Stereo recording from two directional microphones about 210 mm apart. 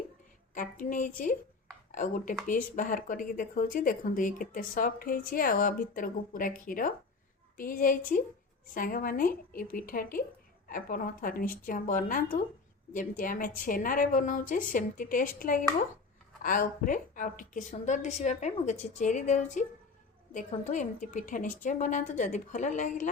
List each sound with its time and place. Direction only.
0.5 s speech: 40° left (ahead or behind)